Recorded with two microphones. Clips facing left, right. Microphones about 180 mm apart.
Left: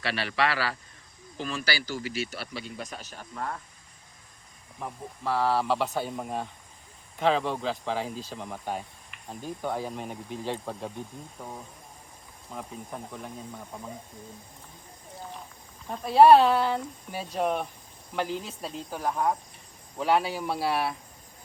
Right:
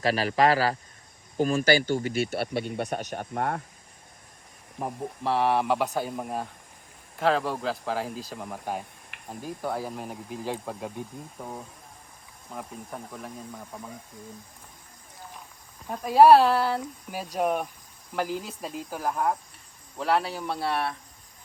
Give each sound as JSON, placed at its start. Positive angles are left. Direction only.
{"t": 0.0, "sound": "a man's voice", "side_deg": -40}
{"t": 4.8, "sound": "speech", "side_deg": -30}
{"t": 7.2, "sound": "cricket", "side_deg": 0}
{"t": 8.3, "sound": "speech", "side_deg": -5}
{"t": 12.5, "sound": "cricket", "side_deg": 0}
{"t": 15.9, "sound": "speech", "side_deg": -10}
{"t": 18.1, "sound": "cricket", "side_deg": -5}